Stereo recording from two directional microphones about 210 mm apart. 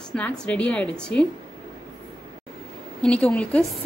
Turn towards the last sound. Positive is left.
turn(degrees=5)  # may be behind; listen again after turning